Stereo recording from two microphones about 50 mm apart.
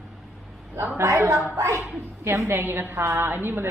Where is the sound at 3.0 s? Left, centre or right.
Right.